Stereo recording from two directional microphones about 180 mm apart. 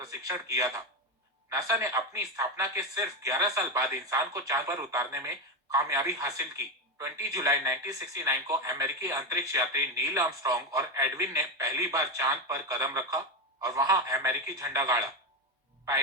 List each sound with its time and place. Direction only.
0.0 s a man's voice: 20° right (ahead or behind)